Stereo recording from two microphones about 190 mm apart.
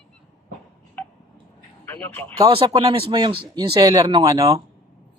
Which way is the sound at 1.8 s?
10° left (ahead or behind).